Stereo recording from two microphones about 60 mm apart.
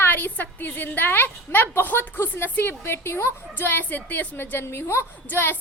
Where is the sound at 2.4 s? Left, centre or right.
Left.